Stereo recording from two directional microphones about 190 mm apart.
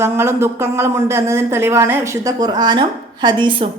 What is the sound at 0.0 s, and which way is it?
A woman's voice, 10° right (ahead or behind).